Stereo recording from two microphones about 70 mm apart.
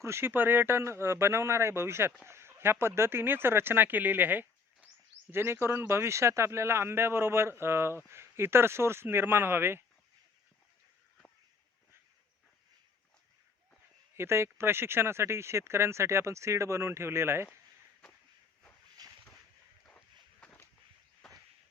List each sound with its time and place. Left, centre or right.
0.0 s a man's voice: right
5.3 s a man's voice: right
14.2 s a man's voice: right
19.0 s a sound: right
21.2 s walk: centre